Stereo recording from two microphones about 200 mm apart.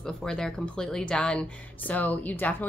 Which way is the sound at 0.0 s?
5° left (ahead or behind).